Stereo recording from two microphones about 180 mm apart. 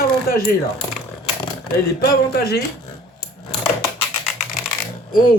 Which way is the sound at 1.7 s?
60° left (ahead or behind).